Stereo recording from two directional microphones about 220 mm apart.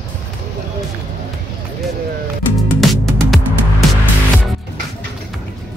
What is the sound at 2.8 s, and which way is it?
Music, centre (ahead or behind).